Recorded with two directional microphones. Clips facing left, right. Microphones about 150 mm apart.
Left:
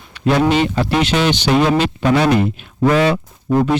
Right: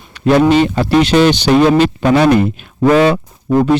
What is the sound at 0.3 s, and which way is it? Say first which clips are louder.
Speech: right 5 dB; 45° right (ahead or behind).